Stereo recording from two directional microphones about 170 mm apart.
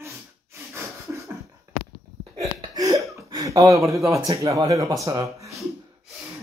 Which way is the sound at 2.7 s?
20° right (ahead or behind).